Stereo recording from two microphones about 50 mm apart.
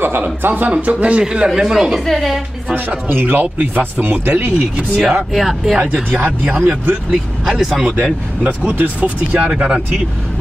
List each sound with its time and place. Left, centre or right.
0.4 s speech: right; by 1.5 s centre
1.5 s speech: centre
3.1 s speech: right
4.9 s speech: centre
7.1 s speech: centre
7.8 s speech: right